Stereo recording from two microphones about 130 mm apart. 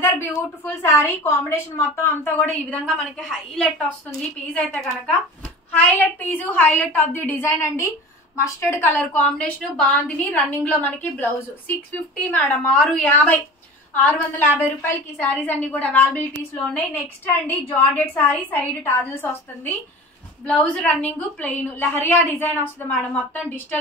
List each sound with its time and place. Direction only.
0.0 s a woman's voice: 20° left (ahead or behind)
2.9 s a woman's voice: centre (ahead or behind)
5.8 s a woman's voice: 10° left (ahead or behind)
17.5 s a woman's voice: 15° left (ahead or behind)